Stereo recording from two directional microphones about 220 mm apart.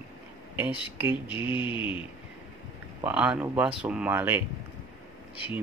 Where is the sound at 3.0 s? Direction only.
5° right (ahead or behind).